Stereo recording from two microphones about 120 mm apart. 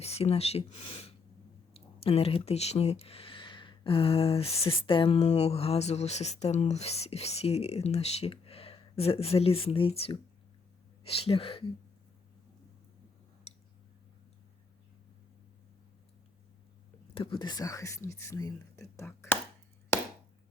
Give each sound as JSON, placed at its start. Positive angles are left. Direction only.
{"t": 0.0, "sound": "speech", "side_deg": 60}
{"t": 13.5, "sound": "a sound", "side_deg": 70}
{"t": 17.2, "sound": "speech", "side_deg": 45}